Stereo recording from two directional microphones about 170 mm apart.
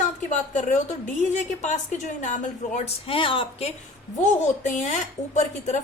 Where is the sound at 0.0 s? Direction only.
45° left (ahead or behind).